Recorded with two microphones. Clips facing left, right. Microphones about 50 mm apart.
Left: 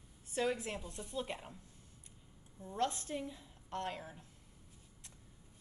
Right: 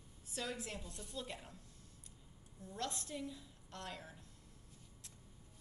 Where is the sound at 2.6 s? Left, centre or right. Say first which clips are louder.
Left 7 dB; left.